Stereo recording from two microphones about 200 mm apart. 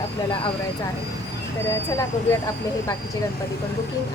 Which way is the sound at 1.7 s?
15° left (ahead or behind).